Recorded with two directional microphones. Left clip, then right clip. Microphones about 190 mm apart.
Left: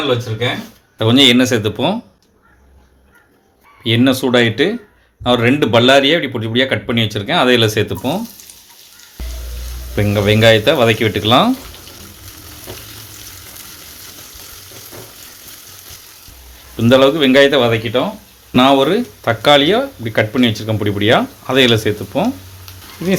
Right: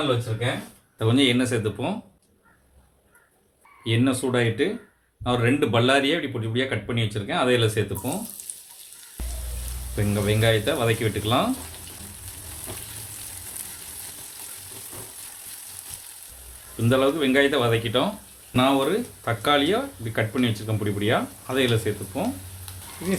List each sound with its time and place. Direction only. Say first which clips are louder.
0.9 s speech: left 11 dB; 40° left (ahead or behind)
3.8 s speech: left 10 dB; 35° left (ahead or behind)
9.9 s speech: left 11 dB; 45° left (ahead or behind)
16.7 s speech: left 11 dB; 40° left (ahead or behind)
18.5 s speech: left 10 dB; 50° left (ahead or behind)